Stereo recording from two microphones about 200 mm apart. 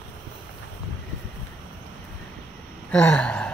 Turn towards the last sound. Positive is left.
turn(degrees=5)  # may be behind; listen again after turning